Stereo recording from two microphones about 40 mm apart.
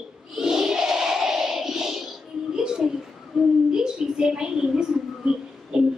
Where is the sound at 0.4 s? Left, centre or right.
Centre.